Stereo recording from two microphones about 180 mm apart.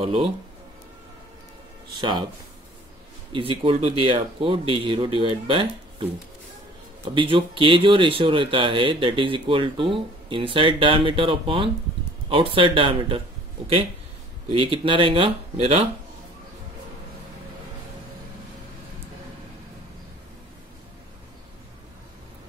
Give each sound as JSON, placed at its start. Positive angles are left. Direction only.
{"t": 0.0, "sound": "speech", "side_deg": -30}
{"t": 2.0, "sound": "speech", "side_deg": -25}
{"t": 3.3, "sound": "speech", "side_deg": -30}
{"t": 7.2, "sound": "speech", "side_deg": -30}
{"t": 14.5, "sound": "speech", "side_deg": -30}